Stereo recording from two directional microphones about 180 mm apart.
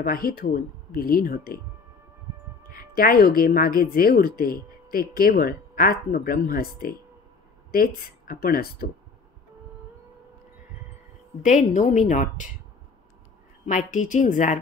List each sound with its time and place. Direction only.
0.0 s speech: 55° left (ahead or behind)
3.0 s speech: 55° left (ahead or behind)
11.4 s a woman's voice: 45° left (ahead or behind)
13.7 s a woman's voice: 45° left (ahead or behind)